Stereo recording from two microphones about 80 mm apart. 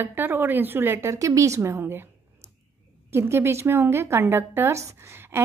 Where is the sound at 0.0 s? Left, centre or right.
Right.